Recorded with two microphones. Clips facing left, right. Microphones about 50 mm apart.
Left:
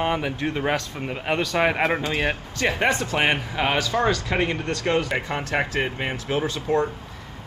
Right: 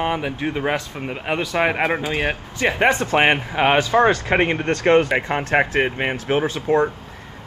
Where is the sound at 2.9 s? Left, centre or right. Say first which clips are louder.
Right 5 dB; right.